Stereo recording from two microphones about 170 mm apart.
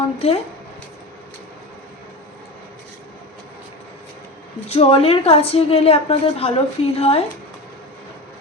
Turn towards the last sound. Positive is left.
turn(degrees=35)  # may be behind; listen again after turning